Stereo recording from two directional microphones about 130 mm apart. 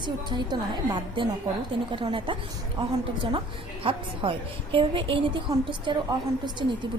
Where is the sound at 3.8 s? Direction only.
40° right (ahead or behind).